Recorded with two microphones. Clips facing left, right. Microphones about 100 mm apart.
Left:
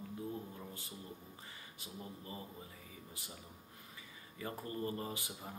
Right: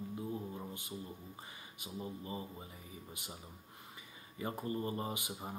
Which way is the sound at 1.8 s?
20° right (ahead or behind).